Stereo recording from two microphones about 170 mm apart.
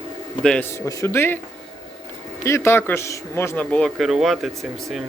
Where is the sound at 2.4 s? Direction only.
15° left (ahead or behind).